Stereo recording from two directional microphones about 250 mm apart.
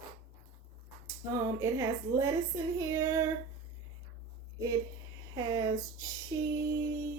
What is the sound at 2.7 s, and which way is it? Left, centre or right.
Female singing, centre.